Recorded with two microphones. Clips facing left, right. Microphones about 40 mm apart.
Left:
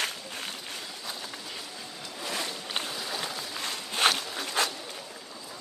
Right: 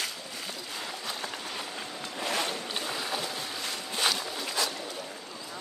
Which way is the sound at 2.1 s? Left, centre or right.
Right.